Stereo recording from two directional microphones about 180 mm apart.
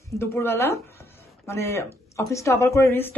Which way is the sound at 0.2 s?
15° left (ahead or behind).